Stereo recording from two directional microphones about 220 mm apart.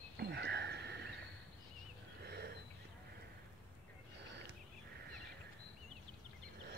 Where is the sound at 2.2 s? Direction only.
45° right (ahead or behind).